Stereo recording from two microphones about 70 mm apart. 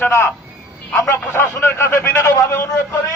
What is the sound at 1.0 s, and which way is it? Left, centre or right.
A man's voice, left.